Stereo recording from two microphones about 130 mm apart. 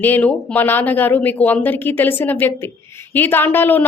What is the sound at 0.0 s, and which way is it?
A woman's voice, 15° left (ahead or behind).